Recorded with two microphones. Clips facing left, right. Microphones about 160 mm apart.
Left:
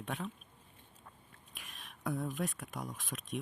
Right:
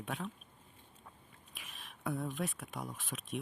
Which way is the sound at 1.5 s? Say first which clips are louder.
Even; centre (ahead or behind).